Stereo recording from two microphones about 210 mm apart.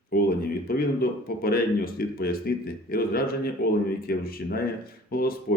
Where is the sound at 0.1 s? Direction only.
45° left (ahead or behind).